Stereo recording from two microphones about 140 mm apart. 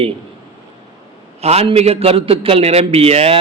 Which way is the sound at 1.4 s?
45° right (ahead or behind).